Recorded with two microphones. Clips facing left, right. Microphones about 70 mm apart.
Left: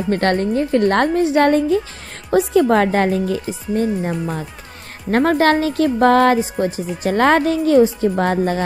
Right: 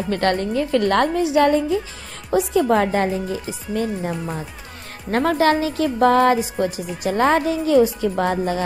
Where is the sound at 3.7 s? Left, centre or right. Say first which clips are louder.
Left 4 dB; left.